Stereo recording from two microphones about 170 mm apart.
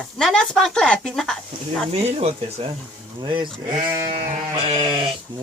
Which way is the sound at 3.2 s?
30° right (ahead or behind).